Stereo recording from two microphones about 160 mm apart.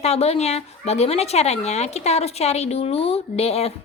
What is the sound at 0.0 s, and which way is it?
A woman's voice, 40° left (ahead or behind).